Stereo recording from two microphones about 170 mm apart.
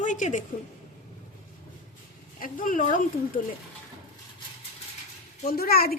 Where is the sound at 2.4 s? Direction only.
55° left (ahead or behind).